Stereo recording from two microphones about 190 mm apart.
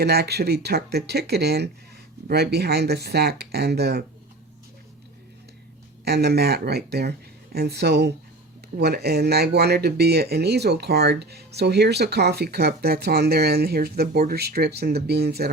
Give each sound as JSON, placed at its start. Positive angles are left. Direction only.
{"t": 0.0, "sound": "speech", "side_deg": -60}
{"t": 6.1, "sound": "speech", "side_deg": -60}